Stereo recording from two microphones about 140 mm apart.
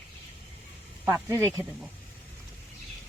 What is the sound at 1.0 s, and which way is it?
Speech, 15° right (ahead or behind).